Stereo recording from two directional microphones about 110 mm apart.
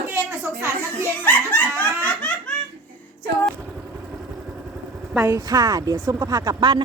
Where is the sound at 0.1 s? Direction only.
25° right (ahead or behind).